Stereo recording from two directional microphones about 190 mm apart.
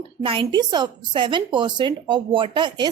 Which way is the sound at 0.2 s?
25° right (ahead or behind).